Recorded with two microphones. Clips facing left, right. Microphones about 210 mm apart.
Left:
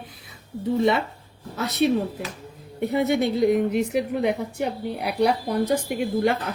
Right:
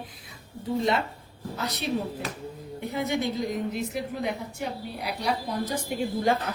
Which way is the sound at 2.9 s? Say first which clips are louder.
Left 6 dB; 65° left (ahead or behind).